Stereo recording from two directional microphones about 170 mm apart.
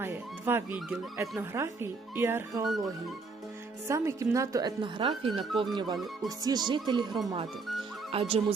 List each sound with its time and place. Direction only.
0.0 s speech: 15° right (ahead or behind)
3.8 s a woman's voice: 15° right (ahead or behind); by 8.5 s 35° right (ahead or behind)